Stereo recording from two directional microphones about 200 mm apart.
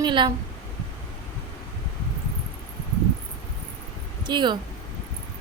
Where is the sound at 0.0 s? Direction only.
20° right (ahead or behind).